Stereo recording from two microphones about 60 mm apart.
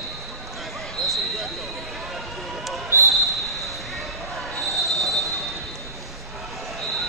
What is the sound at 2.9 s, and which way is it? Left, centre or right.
Basketball bounce, right.